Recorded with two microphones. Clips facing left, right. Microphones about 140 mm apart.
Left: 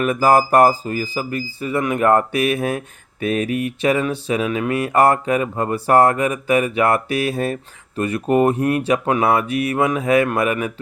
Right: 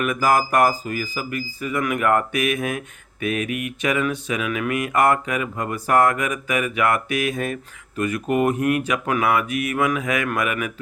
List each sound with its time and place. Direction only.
0.0 s speech: 30° left (ahead or behind)